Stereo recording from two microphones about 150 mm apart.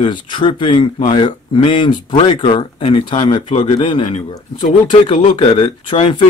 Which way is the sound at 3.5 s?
45° left (ahead or behind).